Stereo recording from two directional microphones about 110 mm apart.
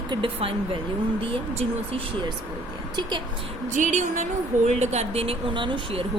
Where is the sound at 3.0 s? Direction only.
45° right (ahead or behind).